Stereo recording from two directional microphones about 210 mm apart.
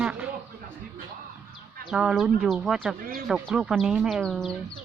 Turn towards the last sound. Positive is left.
turn(degrees=0)  # may be behind; listen again after turning